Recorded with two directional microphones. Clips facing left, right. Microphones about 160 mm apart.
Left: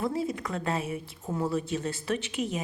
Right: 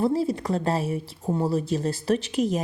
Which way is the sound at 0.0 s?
35° right (ahead or behind).